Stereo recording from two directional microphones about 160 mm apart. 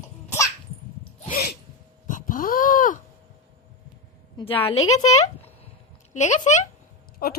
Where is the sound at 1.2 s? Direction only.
70° left (ahead or behind).